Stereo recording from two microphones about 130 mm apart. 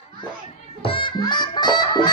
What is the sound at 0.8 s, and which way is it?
Music, 40° left (ahead or behind).